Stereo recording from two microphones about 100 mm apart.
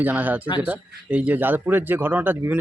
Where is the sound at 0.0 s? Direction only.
15° right (ahead or behind).